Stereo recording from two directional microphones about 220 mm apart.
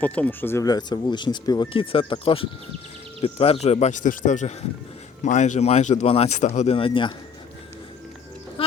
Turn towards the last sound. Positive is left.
turn(degrees=25)  # may be behind; listen again after turning